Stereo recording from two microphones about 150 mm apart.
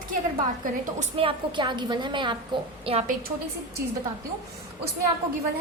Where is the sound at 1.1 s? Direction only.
35° right (ahead or behind).